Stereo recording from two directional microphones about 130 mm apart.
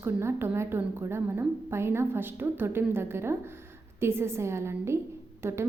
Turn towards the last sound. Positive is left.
turn(degrees=-20)  # may be behind; listen again after turning